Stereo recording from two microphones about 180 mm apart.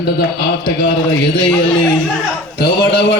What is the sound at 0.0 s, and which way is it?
Speech, 60° left (ahead or behind).